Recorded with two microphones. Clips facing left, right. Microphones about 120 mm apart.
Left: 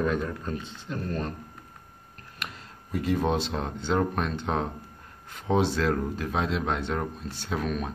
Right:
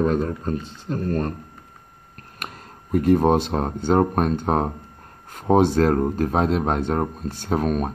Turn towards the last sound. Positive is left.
turn(degrees=-45)  # may be behind; listen again after turning